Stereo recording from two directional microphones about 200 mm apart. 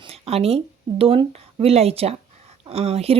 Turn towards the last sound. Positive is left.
turn(degrees=-30)  # may be behind; listen again after turning